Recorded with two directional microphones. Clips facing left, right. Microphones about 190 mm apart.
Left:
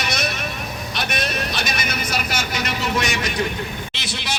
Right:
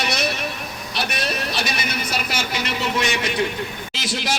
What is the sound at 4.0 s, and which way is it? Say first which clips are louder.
Speech: right 7 dB; 45° right (ahead or behind).